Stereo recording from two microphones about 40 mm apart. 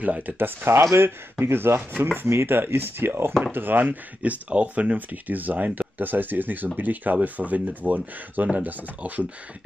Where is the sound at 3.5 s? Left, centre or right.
Right.